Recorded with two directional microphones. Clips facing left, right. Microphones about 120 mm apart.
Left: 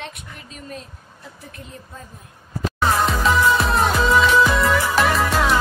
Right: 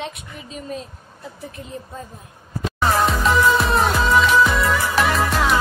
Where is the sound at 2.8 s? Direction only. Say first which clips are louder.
Right 1 dB; centre (ahead or behind).